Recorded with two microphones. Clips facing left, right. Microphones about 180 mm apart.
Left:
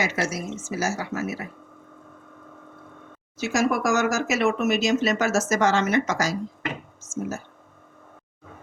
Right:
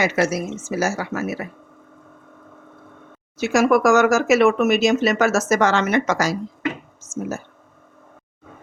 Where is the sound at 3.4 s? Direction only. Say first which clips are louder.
Right 7 dB; 60° right (ahead or behind).